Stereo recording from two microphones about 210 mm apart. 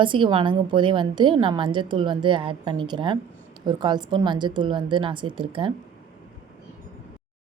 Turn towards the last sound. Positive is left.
turn(degrees=-25)  # may be behind; listen again after turning